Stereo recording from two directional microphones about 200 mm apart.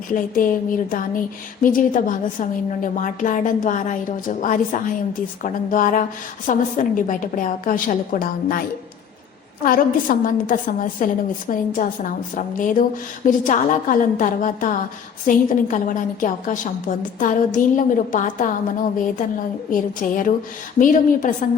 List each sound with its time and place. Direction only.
0.1 s a woman's voice: 45° left (ahead or behind)
9.6 s a woman's voice: 45° left (ahead or behind)